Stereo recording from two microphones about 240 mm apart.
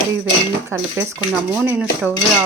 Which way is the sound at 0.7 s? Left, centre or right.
Centre.